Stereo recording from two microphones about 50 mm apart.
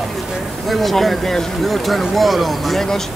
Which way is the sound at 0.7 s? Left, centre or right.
Centre.